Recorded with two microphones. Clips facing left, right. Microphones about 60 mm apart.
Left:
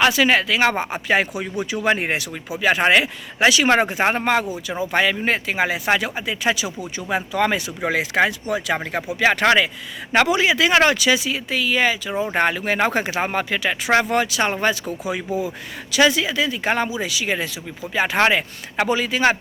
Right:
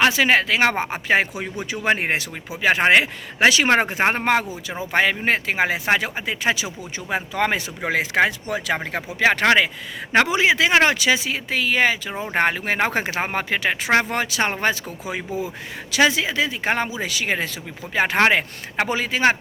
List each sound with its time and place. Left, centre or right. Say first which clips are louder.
0.0 s speech: even; right